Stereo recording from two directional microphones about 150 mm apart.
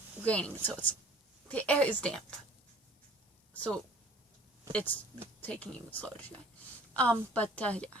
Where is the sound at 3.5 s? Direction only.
10° left (ahead or behind).